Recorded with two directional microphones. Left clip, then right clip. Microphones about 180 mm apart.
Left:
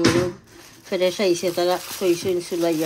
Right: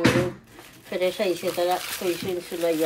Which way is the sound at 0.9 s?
15° left (ahead or behind).